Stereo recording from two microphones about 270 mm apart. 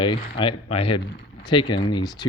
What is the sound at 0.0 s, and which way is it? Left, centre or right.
Speech, centre.